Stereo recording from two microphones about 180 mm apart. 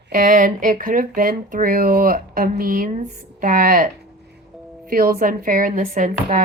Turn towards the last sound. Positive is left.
turn(degrees=-45)  # may be behind; listen again after turning